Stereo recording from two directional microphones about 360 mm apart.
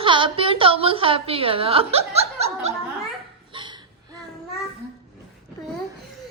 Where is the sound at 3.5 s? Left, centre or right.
Centre.